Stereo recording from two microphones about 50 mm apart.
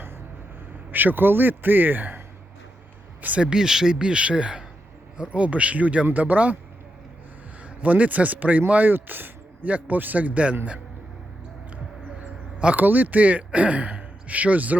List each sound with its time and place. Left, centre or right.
0.9 s speech: right
3.4 s speech: centre; by 6.6 s right
7.6 s speech: right
12.2 s a sound: right
12.7 s speech: right